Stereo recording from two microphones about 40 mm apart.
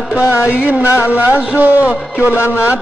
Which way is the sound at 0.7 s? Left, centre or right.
Right.